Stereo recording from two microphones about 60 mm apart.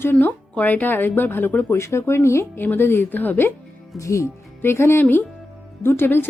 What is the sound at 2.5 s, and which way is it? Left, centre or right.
Speech, left.